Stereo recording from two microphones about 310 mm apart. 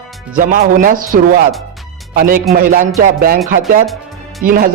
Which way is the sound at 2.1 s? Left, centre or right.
Right.